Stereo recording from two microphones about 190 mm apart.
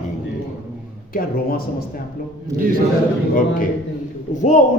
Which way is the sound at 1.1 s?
50° left (ahead or behind).